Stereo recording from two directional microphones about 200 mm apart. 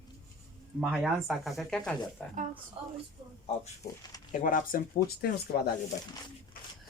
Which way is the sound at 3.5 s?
30° left (ahead or behind).